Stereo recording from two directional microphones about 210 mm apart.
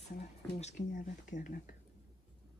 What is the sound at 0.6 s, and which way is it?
Speech, 35° left (ahead or behind).